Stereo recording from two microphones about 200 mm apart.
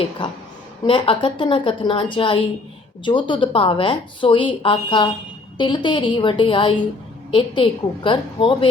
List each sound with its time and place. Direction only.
0.2 s a woman's voice: 25° left (ahead or behind)